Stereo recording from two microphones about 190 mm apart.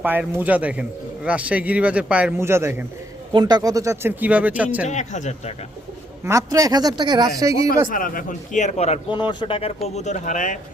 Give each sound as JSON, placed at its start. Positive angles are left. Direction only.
{"t": 0.0, "sound": "speech", "side_deg": -10}
{"t": 4.9, "sound": "a man's voice", "side_deg": 40}
{"t": 6.2, "sound": "speech", "side_deg": -15}
{"t": 7.9, "sound": "a man's voice", "side_deg": 45}